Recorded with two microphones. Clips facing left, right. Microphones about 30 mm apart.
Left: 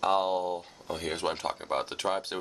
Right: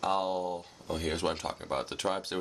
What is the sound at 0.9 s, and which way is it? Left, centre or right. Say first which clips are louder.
Speech: even; centre.